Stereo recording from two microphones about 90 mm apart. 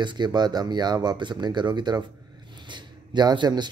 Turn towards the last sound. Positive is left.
turn(degrees=-55)  # may be behind; listen again after turning